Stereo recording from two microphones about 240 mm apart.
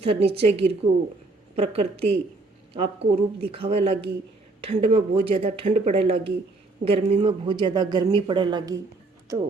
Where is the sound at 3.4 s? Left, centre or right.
Right.